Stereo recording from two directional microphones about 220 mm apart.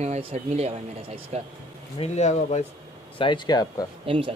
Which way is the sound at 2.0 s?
30° left (ahead or behind).